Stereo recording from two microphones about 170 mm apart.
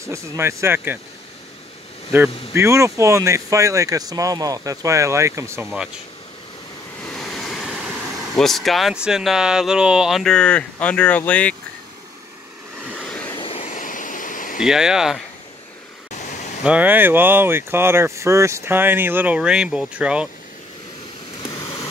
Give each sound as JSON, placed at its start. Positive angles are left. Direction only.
{"t": 0.0, "sound": "speech", "side_deg": -15}
{"t": 2.1, "sound": "speech", "side_deg": -15}
{"t": 7.2, "sound": "speech", "side_deg": 5}
{"t": 12.9, "sound": "vehicle", "side_deg": 5}
{"t": 13.3, "sound": "vehicle", "side_deg": 30}
{"t": 13.7, "sound": "a sound", "side_deg": 50}
{"t": 14.6, "sound": "speech", "side_deg": -5}
{"t": 16.1, "sound": "a sound", "side_deg": 45}
{"t": 16.6, "sound": "speech", "side_deg": -10}
{"t": 21.4, "sound": "a sound", "side_deg": 20}